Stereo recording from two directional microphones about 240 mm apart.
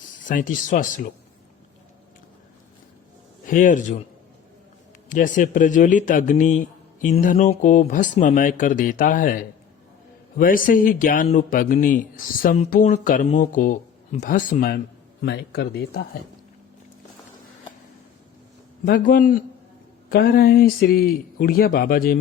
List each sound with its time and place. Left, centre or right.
0.2 s a man's voice: left
3.4 s a man's voice: left
5.0 s a man's voice: left
18.9 s a man's voice: left